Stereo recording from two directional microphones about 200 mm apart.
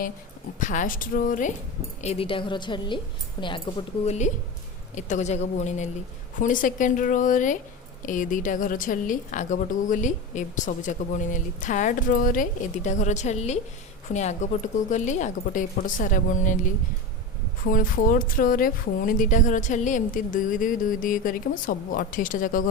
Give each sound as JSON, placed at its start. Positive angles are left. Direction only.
{"t": 0.6, "sound": "a woman's voice", "side_deg": 40}
{"t": 2.0, "sound": "a woman's voice", "side_deg": 30}
{"t": 4.0, "sound": "a woman's voice", "side_deg": 35}
{"t": 17.7, "sound": "a woman's voice", "side_deg": 45}